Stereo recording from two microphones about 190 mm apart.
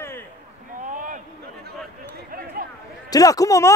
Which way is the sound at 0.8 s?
45° right (ahead or behind).